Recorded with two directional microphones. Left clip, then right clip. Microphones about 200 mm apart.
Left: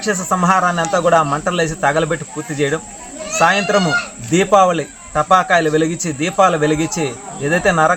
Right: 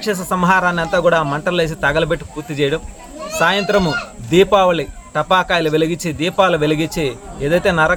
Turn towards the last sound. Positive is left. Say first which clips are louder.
# left 1 dB
turn(degrees=-20)  # may be behind; listen again after turning